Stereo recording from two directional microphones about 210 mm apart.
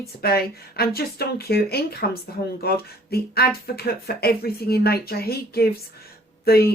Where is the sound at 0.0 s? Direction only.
45° left (ahead or behind).